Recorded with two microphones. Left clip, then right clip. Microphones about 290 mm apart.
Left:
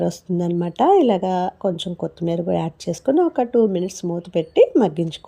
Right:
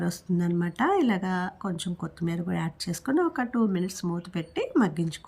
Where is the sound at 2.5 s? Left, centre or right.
Centre.